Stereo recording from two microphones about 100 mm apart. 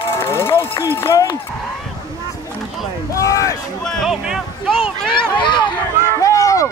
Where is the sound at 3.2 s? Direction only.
35° left (ahead or behind).